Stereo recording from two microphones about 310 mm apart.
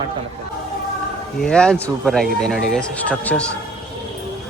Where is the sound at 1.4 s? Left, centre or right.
Centre.